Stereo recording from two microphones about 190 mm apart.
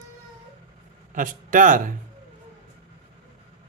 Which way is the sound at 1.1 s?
45° right (ahead or behind).